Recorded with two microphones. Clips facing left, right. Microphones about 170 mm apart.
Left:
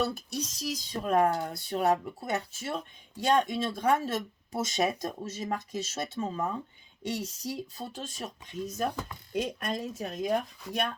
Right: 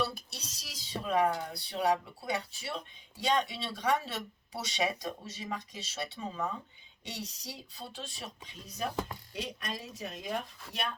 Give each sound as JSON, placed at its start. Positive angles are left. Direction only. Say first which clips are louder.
{"t": 0.0, "sound": "speech", "louder": "left 5 dB", "side_deg": 50}